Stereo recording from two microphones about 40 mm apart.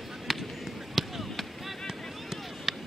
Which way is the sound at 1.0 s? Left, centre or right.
Centre.